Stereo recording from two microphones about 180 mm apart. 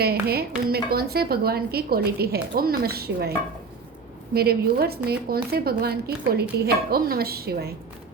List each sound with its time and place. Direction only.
0.0 s a woman's voice: 60° right (ahead or behind)
4.4 s a woman's voice: 60° right (ahead or behind)